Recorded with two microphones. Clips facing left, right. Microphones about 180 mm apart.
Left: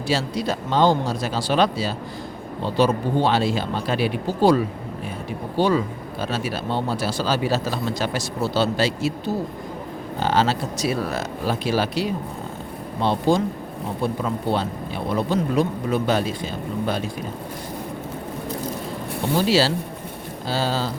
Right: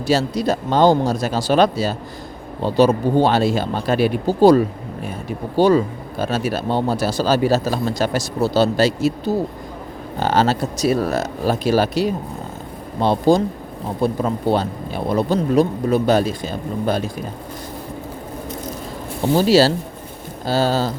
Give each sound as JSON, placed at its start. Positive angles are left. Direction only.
{"t": 0.1, "sound": "a man's voice", "side_deg": -40}
{"t": 19.4, "sound": "a man's voice", "side_deg": -40}